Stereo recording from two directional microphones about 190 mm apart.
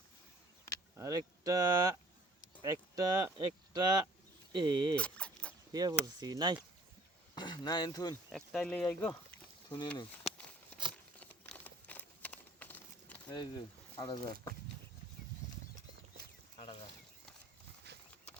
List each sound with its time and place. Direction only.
0.9 s speech: 20° right (ahead or behind)
4.9 s a sound: 5° left (ahead or behind)
5.7 s speech: 20° right (ahead or behind)
7.3 s speech: 25° left (ahead or behind)
8.3 s speech: centre (ahead or behind)
9.6 s speech: 25° left (ahead or behind)
11.2 s a sound: 10° left (ahead or behind)
13.3 s speech: 25° left (ahead or behind)
16.6 s a sound: 25° left (ahead or behind)
17.9 s horse: 60° right (ahead or behind)